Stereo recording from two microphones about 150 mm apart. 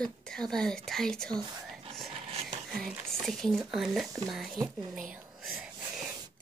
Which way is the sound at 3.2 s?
Centre (ahead or behind).